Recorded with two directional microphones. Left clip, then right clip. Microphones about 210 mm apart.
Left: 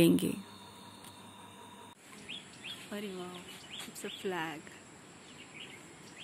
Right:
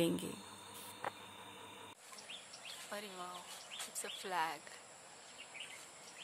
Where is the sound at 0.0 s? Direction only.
30° left (ahead or behind).